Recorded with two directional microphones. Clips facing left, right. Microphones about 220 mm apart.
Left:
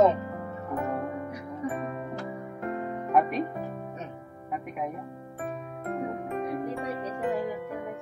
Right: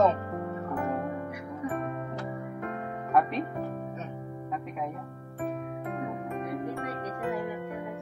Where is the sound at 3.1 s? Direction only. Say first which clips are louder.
Left 1 dB; 15° left (ahead or behind).